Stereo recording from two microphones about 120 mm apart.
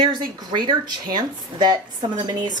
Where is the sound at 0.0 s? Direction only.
40° right (ahead or behind).